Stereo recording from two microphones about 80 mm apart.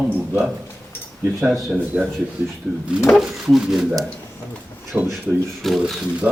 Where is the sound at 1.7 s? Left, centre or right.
Centre.